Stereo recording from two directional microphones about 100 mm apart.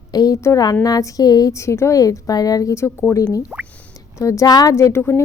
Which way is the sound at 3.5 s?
10° right (ahead or behind).